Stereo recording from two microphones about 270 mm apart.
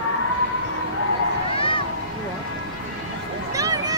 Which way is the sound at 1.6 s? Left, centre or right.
Centre.